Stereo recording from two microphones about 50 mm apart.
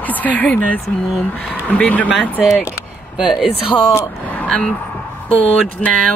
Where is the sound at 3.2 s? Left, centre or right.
Centre.